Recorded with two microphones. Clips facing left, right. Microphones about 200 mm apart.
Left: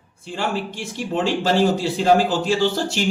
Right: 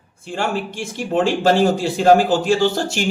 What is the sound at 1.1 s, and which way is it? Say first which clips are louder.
Speech: right 4 dB; 50° right (ahead or behind).